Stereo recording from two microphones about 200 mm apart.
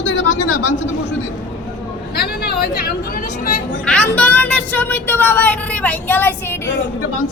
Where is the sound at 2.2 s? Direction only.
50° left (ahead or behind).